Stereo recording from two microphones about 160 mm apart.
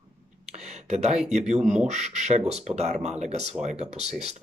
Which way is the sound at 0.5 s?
45° right (ahead or behind).